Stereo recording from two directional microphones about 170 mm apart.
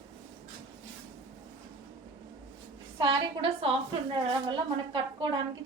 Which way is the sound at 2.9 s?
30° right (ahead or behind).